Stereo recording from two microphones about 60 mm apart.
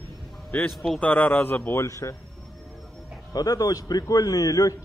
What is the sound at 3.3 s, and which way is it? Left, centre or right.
A man's voice, left.